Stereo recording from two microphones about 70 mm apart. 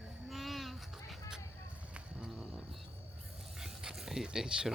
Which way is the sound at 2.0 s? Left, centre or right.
Centre.